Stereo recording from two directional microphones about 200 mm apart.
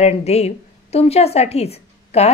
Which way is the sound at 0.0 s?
30° left (ahead or behind).